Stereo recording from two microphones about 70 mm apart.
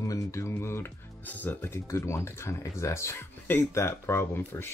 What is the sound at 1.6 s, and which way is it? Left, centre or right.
Speech, left.